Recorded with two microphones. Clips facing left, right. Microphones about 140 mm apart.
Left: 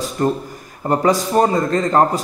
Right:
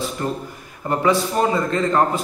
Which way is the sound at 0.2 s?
40° left (ahead or behind).